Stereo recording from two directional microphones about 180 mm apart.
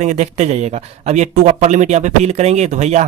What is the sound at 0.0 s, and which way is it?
Speech, 40° right (ahead or behind).